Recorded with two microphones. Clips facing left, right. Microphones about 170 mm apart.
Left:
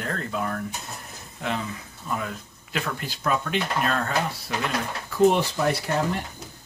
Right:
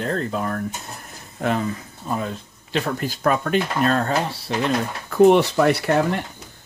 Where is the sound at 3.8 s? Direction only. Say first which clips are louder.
Right 5 dB; 35° right (ahead or behind).